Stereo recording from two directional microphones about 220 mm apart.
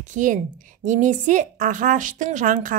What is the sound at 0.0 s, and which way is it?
Speech, 35° right (ahead or behind).